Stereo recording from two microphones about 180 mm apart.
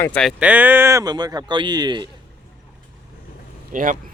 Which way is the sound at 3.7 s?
45° right (ahead or behind).